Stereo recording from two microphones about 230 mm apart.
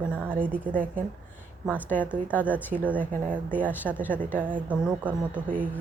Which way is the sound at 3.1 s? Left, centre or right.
Right.